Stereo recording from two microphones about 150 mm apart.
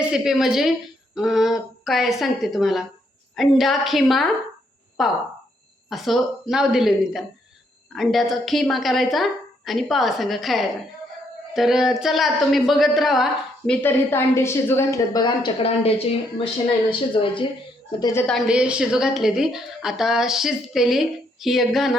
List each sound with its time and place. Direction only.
0.1 s a woman's voice: centre (ahead or behind)
13.8 s a woman's voice: 15° left (ahead or behind)
15.6 s a woman's voice: 40° left (ahead or behind)
17.2 s a woman's voice: 35° left (ahead or behind)
18.0 s a woman's voice: 15° left (ahead or behind)
18.3 s a woman's voice: centre (ahead or behind)